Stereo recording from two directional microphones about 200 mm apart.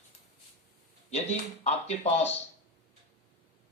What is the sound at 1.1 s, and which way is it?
Speech, 35° left (ahead or behind).